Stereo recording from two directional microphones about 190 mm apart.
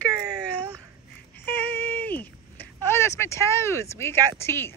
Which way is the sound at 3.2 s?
15° left (ahead or behind).